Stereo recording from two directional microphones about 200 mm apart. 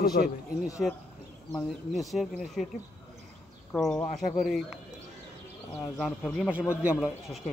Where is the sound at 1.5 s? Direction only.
Centre (ahead or behind).